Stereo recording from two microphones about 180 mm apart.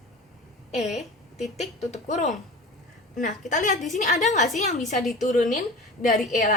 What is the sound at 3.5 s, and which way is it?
A woman's voice, 45° left (ahead or behind).